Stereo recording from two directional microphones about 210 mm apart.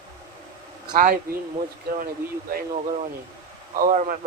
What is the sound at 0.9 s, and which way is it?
Speech, 40° right (ahead or behind).